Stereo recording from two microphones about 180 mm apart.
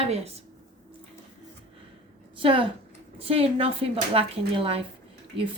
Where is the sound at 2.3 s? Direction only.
30° right (ahead or behind).